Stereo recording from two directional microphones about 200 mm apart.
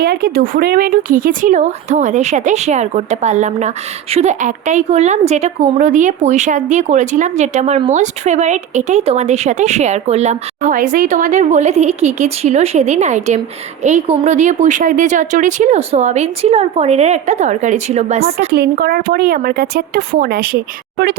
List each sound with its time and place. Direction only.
0.0 s speech: 50° right (ahead or behind); by 18.4 s 30° right (ahead or behind)
18.5 s speech: 50° right (ahead or behind)